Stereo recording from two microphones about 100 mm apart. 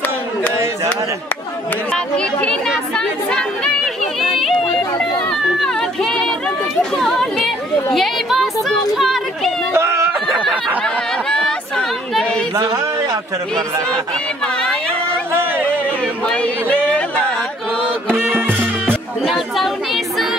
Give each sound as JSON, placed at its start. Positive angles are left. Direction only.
{"t": 1.9, "sound": "speech", "side_deg": 10}
{"t": 3.0, "sound": "chatter", "side_deg": 5}
{"t": 5.3, "sound": "a sound", "side_deg": 5}
{"t": 6.8, "sound": "speech", "side_deg": 5}
{"t": 9.8, "sound": "a sound", "side_deg": -25}
{"t": 10.8, "sound": "chatter", "side_deg": 10}
{"t": 12.5, "sound": "speech", "side_deg": -35}
{"t": 16.3, "sound": "speech", "side_deg": 10}
{"t": 18.5, "sound": "music", "side_deg": -15}
{"t": 19.2, "sound": "a sound", "side_deg": 0}